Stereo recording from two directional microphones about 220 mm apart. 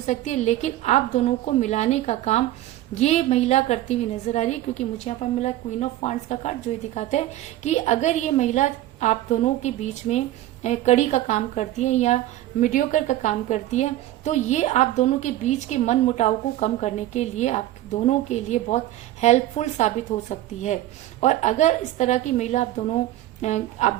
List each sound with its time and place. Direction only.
0.0 s a woman's voice: 30° left (ahead or behind)